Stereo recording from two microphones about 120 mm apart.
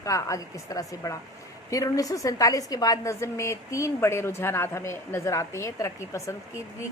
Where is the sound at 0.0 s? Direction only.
25° left (ahead or behind).